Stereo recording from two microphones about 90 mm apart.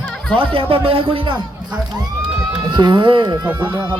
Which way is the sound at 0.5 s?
90° right.